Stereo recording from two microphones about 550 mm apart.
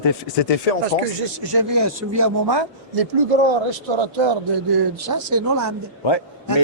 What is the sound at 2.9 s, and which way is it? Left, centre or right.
A man's voice, right.